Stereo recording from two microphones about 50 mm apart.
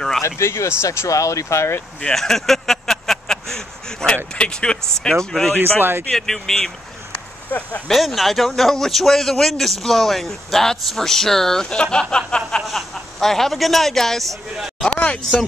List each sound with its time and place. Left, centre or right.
0.2 s speech: left
2.1 s a sound: centre
4.4 s speech: centre
5.6 s speech: right
6.1 s speech: centre
7.9 s speech: centre
12.6 s speech: centre
14.9 s speech: left